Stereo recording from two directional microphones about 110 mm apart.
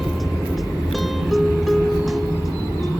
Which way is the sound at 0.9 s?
Centre (ahead or behind).